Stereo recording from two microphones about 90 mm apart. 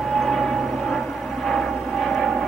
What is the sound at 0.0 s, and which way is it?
Vehicle, centre (ahead or behind).